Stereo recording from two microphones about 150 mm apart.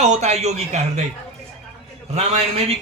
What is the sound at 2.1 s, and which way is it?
Speech, 45° right (ahead or behind).